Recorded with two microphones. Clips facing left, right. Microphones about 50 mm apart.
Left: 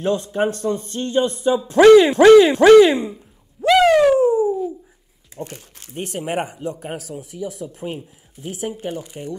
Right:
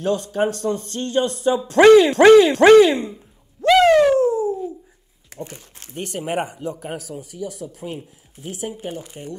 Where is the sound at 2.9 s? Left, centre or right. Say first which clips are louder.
Left 1 dB; centre.